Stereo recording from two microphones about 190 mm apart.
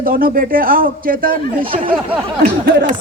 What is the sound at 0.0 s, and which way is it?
Speech, 50° right (ahead or behind).